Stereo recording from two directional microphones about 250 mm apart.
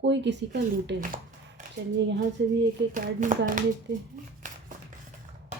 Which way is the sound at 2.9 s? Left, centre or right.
Right.